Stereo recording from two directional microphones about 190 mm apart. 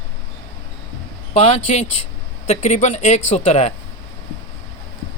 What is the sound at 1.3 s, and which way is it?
Speech, 35° left (ahead or behind).